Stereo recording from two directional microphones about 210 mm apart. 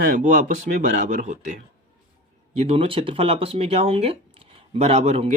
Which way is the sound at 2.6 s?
25° right (ahead or behind).